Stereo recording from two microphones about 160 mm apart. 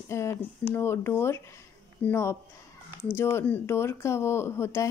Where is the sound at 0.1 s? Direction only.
15° left (ahead or behind).